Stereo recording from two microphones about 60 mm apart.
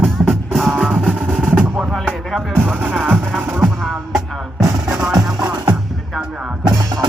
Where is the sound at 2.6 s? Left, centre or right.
Right.